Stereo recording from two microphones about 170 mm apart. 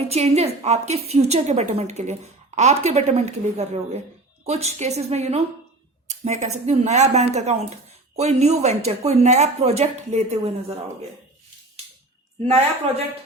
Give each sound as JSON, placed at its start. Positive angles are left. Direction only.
{"t": 0.1, "sound": "speech", "side_deg": -40}
{"t": 12.5, "sound": "speech", "side_deg": -40}